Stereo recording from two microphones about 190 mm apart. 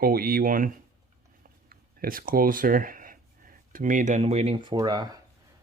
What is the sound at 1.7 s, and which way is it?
Speech, 50° right (ahead or behind).